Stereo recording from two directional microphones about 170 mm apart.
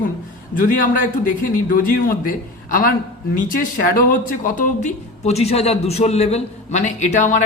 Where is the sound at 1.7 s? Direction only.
55° left (ahead or behind).